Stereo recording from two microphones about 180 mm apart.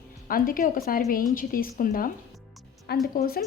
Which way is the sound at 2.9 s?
60° left (ahead or behind).